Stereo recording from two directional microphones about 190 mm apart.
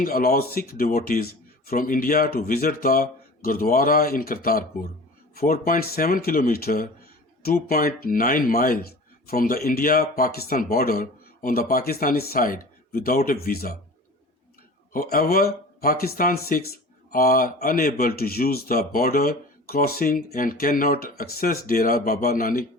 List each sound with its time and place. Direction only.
0.0 s speech: 50° left (ahead or behind)
14.9 s speech: 50° left (ahead or behind)